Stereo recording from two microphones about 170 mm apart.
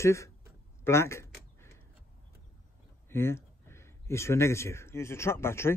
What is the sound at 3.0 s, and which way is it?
Speech, 15° left (ahead or behind).